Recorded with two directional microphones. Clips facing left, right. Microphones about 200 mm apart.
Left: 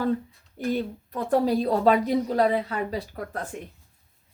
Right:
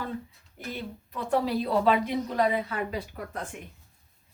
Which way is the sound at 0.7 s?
45° left (ahead or behind).